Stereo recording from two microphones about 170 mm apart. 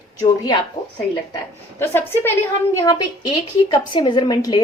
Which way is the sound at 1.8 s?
15° left (ahead or behind).